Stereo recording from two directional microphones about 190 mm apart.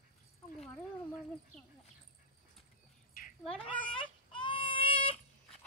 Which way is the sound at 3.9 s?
25° left (ahead or behind).